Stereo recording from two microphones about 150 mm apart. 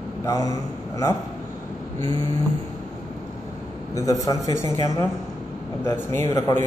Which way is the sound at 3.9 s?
20° left (ahead or behind).